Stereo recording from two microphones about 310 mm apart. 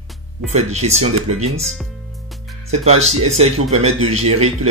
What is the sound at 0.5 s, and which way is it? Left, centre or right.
Speech, right.